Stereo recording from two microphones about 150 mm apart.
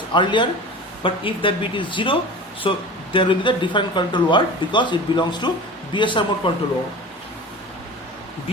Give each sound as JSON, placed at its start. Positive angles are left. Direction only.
{"t": 0.1, "sound": "speech", "side_deg": 30}